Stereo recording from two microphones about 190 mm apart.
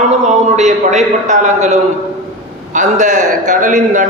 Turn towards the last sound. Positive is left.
turn(degrees=-45)  # may be behind; listen again after turning